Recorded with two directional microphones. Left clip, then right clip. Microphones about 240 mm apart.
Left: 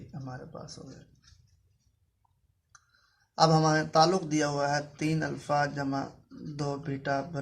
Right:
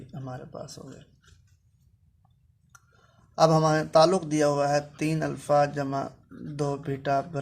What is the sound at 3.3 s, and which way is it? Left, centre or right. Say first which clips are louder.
Speech: right 3 dB; right.